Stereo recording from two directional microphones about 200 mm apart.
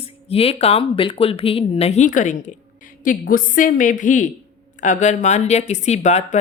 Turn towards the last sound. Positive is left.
turn(degrees=35)  # may be behind; listen again after turning